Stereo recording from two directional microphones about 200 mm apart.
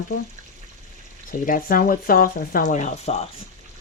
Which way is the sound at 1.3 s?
45° left (ahead or behind).